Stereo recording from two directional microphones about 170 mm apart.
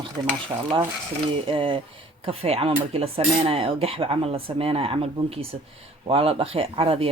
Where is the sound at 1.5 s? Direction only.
30° right (ahead or behind).